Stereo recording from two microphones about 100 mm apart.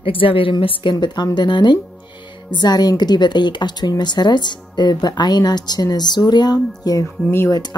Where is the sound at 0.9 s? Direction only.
45° left (ahead or behind).